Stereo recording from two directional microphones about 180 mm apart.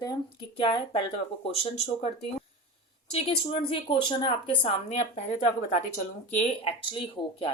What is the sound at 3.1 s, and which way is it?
A woman's voice, 30° left (ahead or behind).